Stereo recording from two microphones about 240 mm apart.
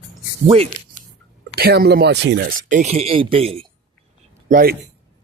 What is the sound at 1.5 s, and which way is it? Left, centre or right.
Speech, right.